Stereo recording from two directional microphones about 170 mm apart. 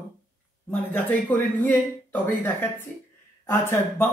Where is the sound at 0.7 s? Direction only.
10° left (ahead or behind).